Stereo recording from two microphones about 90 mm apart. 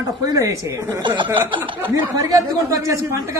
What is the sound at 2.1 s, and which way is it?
A man's voice, 40° right (ahead or behind).